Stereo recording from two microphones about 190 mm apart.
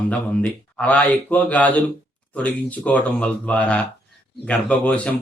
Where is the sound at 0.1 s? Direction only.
5° left (ahead or behind).